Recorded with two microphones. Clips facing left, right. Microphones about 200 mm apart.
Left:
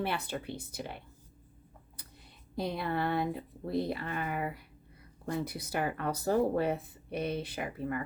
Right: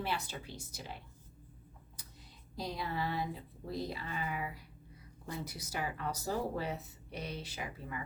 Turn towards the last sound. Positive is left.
turn(degrees=55)  # may be behind; listen again after turning